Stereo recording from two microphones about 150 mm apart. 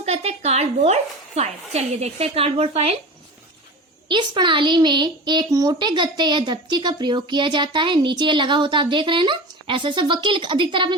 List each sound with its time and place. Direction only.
0.0 s a woman's voice: 45° right (ahead or behind)
4.1 s a child's voice: 30° right (ahead or behind)